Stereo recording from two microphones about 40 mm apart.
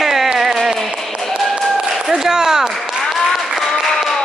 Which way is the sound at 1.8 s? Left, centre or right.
Centre.